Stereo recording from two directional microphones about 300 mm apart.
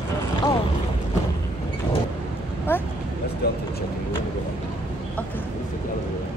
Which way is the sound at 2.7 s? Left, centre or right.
Centre.